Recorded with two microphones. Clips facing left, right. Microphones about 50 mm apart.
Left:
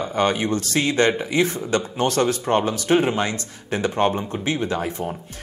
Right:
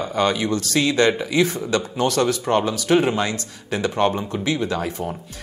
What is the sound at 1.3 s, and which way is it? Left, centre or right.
Speech, left.